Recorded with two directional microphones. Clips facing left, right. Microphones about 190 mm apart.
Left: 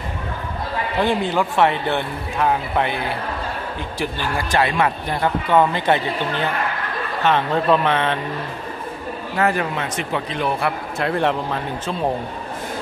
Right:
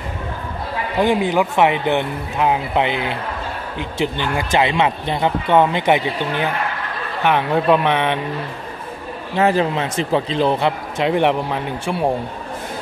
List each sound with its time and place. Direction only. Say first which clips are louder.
0.9 s a man's voice: right 3 dB; 15° right (ahead or behind)
9.4 s speech: right 4 dB; 25° right (ahead or behind)
11.0 s a man's voice: right 4 dB; 15° right (ahead or behind)